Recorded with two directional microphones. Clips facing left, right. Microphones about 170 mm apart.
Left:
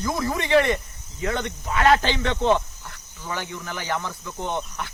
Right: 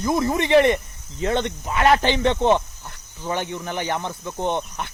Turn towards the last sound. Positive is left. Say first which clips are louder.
# right 4 dB
turn(degrees=-20)  # may be behind; listen again after turning